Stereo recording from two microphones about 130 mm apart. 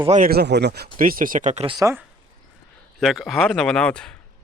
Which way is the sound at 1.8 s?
20° right (ahead or behind).